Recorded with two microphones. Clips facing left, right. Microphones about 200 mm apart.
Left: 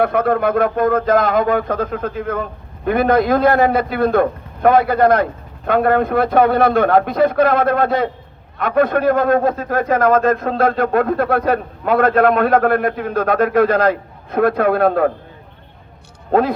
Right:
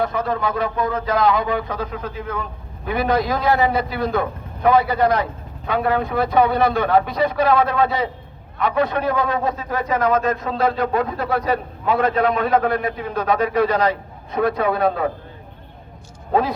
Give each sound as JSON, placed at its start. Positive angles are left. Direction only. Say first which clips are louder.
{"t": 0.0, "sound": "a man's voice", "louder": "left 6 dB", "side_deg": 60}
{"t": 16.3, "sound": "speech", "louder": "left 4 dB", "side_deg": 55}